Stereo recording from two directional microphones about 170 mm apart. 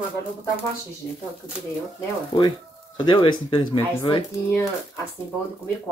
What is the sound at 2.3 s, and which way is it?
Speech, 25° left (ahead or behind).